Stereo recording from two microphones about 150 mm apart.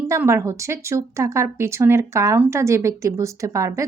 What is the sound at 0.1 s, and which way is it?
Speech, 20° right (ahead or behind).